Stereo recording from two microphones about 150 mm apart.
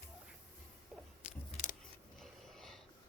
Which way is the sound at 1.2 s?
55° left (ahead or behind).